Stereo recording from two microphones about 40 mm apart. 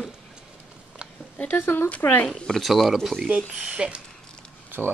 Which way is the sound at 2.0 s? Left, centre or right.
Left.